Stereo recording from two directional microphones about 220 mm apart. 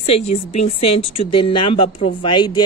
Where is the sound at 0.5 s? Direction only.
30° left (ahead or behind).